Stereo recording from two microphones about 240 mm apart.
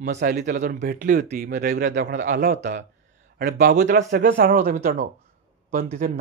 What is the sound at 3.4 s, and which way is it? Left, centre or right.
Speech, right.